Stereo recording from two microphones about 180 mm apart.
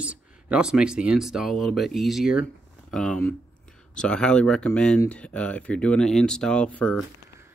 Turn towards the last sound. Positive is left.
turn(degrees=5)  # may be behind; listen again after turning